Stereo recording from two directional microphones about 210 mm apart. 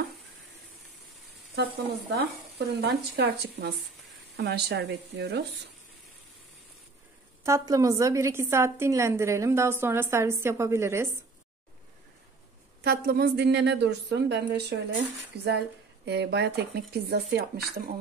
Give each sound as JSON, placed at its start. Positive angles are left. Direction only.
{"t": 1.5, "sound": "a woman's voice", "side_deg": -50}
{"t": 7.4, "sound": "a woman's voice", "side_deg": -15}
{"t": 12.8, "sound": "a woman's voice", "side_deg": -45}